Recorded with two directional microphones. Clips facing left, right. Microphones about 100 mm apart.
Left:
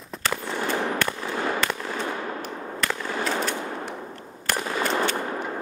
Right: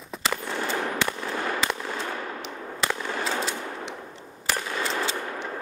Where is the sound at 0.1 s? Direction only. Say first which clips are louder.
Left 1 dB; centre (ahead or behind).